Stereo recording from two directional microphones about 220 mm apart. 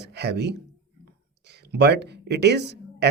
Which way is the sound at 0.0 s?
50° right (ahead or behind).